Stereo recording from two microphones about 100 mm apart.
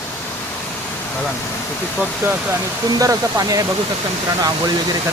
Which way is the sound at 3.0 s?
35° right (ahead or behind).